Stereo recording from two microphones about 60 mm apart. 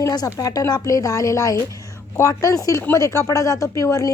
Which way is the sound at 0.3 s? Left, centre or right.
Left.